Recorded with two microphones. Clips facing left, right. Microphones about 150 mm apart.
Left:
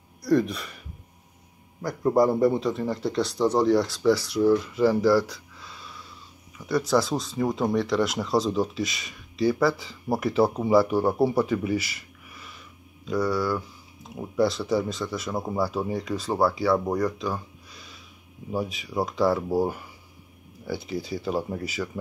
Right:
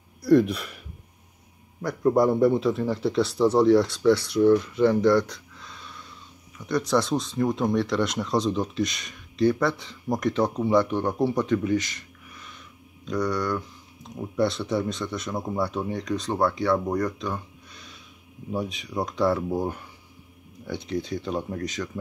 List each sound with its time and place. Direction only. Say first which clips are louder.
0.2 s speech: right 4 dB; centre (ahead or behind)
16.9 s a sound: left 1 dB; centre (ahead or behind)
18.5 s speech: even; 5° left (ahead or behind)